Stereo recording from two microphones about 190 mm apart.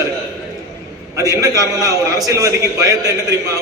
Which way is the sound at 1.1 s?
15° right (ahead or behind).